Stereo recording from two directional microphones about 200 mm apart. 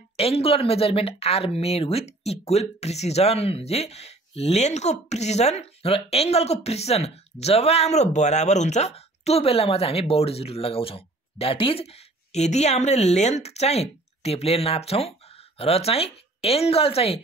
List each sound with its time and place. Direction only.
0.2 s speech: 30° left (ahead or behind)